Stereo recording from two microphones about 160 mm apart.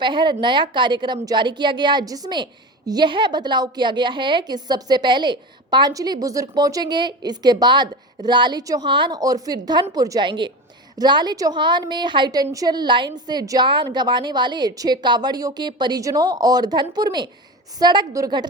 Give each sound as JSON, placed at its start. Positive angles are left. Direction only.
{"t": 0.0, "sound": "a woman's voice", "side_deg": -30}